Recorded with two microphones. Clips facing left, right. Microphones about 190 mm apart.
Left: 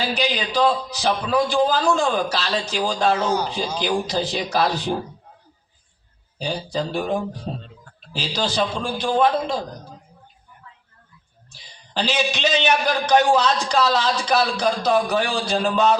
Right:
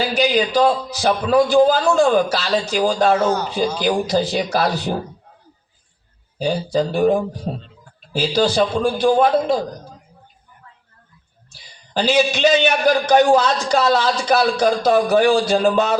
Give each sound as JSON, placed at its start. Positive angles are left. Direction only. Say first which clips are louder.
{"t": 0.2, "sound": "a man's voice", "louder": "right 6 dB", "side_deg": -40}
{"t": 3.3, "sound": "a man's voice", "louder": "right 3 dB", "side_deg": 10}
{"t": 4.1, "sound": "a man's voice", "louder": "right 5 dB", "side_deg": -45}
{"t": 6.4, "sound": "a man's voice", "louder": "right 6 dB", "side_deg": -45}
{"t": 8.1, "sound": "a man's voice", "louder": "right 7 dB", "side_deg": -45}
{"t": 11.9, "sound": "a man's voice", "louder": "right 6 dB", "side_deg": -40}